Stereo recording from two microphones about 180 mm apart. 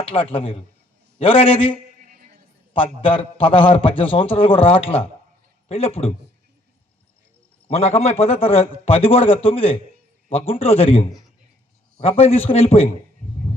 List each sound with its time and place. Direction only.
0.0 s a man's voice: 30° left (ahead or behind)
2.0 s a sound: 45° right (ahead or behind)
2.7 s a man's voice: 30° left (ahead or behind)
7.7 s a man's voice: 35° left (ahead or behind)